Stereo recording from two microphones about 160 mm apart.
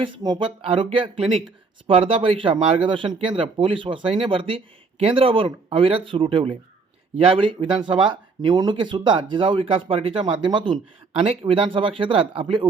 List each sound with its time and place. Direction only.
0.0 s speech: 30° right (ahead or behind)